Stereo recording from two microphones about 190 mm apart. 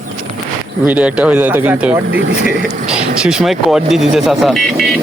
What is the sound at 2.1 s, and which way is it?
Speech, 60° right (ahead or behind).